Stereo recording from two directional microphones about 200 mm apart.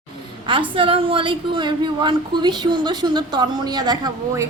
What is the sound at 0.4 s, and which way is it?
A woman's voice, 25° right (ahead or behind).